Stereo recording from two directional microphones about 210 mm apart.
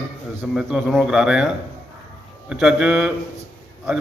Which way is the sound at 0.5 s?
Centre (ahead or behind).